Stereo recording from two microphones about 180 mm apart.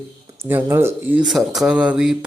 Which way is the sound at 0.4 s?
10° right (ahead or behind).